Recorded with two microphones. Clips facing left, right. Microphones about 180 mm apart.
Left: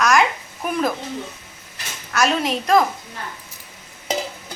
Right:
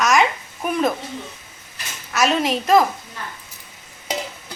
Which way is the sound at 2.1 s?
Centre (ahead or behind).